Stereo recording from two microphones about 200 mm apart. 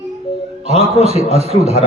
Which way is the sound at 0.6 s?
30° right (ahead or behind).